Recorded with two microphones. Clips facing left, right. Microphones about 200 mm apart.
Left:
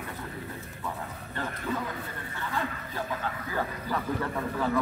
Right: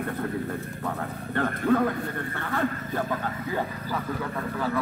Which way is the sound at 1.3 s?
60° right (ahead or behind).